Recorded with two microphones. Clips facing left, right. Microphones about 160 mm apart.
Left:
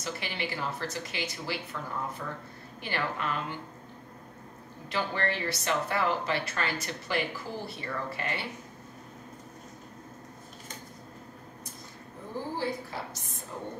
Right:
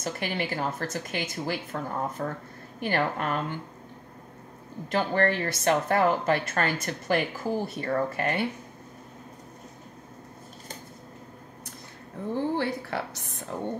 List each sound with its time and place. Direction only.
0.0 s speech: 50° right (ahead or behind)
4.9 s speech: 50° right (ahead or behind)
12.5 s a woman's voice: 65° right (ahead or behind)